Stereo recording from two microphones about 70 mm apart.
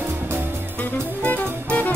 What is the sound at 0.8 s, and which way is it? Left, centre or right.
Music, left.